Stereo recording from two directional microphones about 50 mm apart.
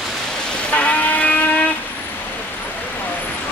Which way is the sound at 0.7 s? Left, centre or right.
Left.